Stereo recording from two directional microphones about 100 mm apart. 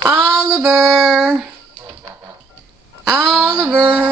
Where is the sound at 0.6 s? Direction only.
5° right (ahead or behind).